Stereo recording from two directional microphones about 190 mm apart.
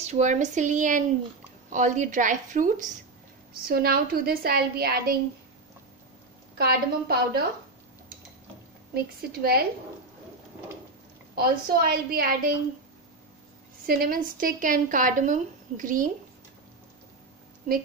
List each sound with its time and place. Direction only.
0.0 s a woman's voice: 40° right (ahead or behind)
3.6 s a woman's voice: 55° right (ahead or behind)
6.6 s a woman's voice: 55° right (ahead or behind)
8.9 s a woman's voice: 55° right (ahead or behind)
11.3 s a woman's voice: 50° right (ahead or behind)
13.8 s a woman's voice: 50° right (ahead or behind)